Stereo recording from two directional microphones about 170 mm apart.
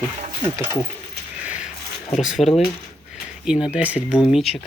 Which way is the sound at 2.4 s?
40° left (ahead or behind).